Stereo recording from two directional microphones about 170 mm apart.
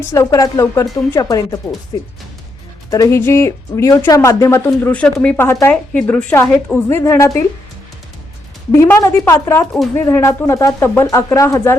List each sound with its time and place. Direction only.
0.1 s speech: 20° left (ahead or behind)
8.7 s speech: 15° left (ahead or behind)